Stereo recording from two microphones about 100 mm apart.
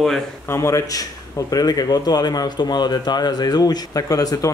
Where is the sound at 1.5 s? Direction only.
40° left (ahead or behind).